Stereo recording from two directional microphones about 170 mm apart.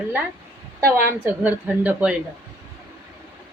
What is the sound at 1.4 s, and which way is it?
Speech, 10° right (ahead or behind).